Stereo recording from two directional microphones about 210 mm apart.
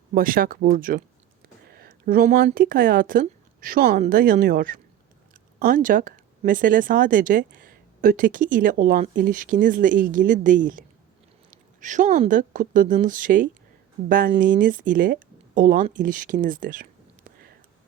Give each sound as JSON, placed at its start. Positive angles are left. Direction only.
{"t": 0.1, "sound": "speech", "side_deg": -40}
{"t": 1.6, "sound": "a sound", "side_deg": -45}
{"t": 2.5, "sound": "speech", "side_deg": -40}